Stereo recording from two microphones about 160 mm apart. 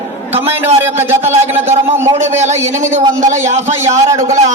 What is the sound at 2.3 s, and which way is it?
A man's voice, 45° right (ahead or behind).